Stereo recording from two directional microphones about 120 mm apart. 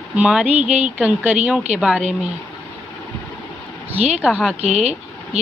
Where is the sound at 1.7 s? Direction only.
70° right (ahead or behind).